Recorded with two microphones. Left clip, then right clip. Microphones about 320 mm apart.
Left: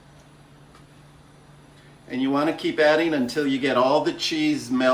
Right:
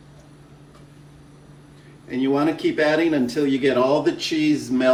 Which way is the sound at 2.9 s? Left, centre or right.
Centre.